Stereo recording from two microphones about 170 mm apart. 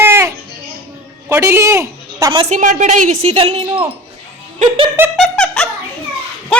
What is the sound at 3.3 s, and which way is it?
A woman's voice, 30° right (ahead or behind).